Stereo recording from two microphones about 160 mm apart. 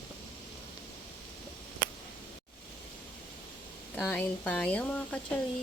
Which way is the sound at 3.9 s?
5° left (ahead or behind).